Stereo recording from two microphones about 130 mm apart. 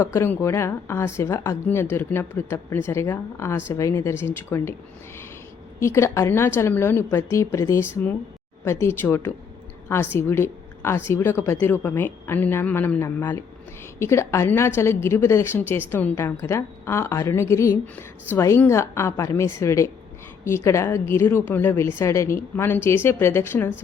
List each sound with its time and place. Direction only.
0.0 s a woman's voice: 20° left (ahead or behind)
5.8 s a woman's voice: 20° left (ahead or behind)